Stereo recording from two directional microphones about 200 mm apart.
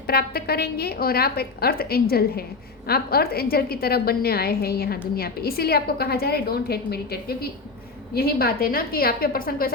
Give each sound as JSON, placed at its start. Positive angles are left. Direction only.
{"t": 0.1, "sound": "a woman's voice", "side_deg": 50}